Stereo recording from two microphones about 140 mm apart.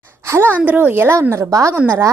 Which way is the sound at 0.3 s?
15° right (ahead or behind).